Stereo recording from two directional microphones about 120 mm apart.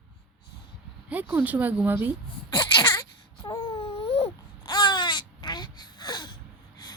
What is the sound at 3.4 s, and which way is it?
Baby cry, 45° left (ahead or behind).